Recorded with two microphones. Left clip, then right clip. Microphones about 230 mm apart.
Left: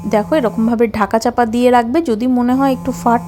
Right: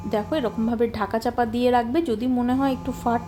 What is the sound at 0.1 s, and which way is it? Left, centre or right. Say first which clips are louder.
A woman's voice: left 10 dB; left.